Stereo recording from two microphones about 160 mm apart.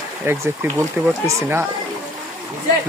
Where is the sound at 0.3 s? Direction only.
15° right (ahead or behind).